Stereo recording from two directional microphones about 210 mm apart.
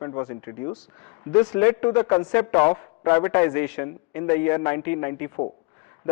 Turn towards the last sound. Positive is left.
turn(degrees=15)  # may be behind; listen again after turning